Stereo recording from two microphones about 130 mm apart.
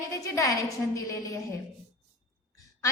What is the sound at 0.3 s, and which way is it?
A woman's voice, 25° left (ahead or behind).